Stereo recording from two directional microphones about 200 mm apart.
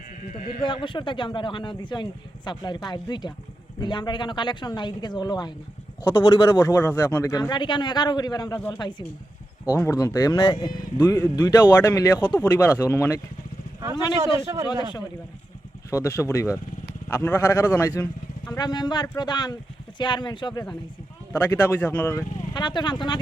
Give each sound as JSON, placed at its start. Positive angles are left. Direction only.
{"t": 0.6, "sound": "speech", "side_deg": 25}
{"t": 11.0, "sound": "speech", "side_deg": 10}
{"t": 14.3, "sound": "a man's voice", "side_deg": -15}
{"t": 15.9, "sound": "speech", "side_deg": 15}